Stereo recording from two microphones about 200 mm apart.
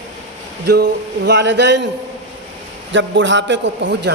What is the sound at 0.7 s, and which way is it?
A man's voice, 60° right (ahead or behind).